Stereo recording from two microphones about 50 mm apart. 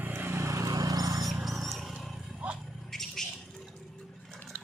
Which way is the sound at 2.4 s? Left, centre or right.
Centre.